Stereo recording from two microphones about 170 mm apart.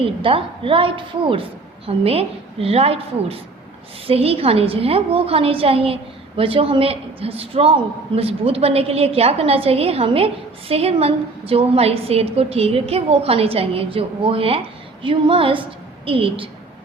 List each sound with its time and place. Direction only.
0.0 s a woman's voice: 30° right (ahead or behind)